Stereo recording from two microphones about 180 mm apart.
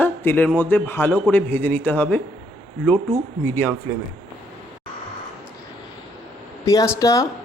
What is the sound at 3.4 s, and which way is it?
Speech, 10° left (ahead or behind).